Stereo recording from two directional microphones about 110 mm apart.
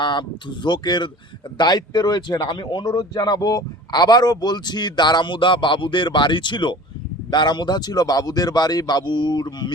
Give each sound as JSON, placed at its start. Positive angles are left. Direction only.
{"t": 0.0, "sound": "speech", "side_deg": 45}